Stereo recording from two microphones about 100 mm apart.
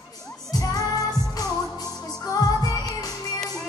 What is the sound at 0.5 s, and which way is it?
Music, 40° left (ahead or behind).